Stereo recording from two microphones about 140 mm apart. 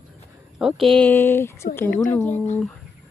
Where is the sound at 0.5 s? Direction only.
Centre (ahead or behind); by 1.6 s 15° left (ahead or behind).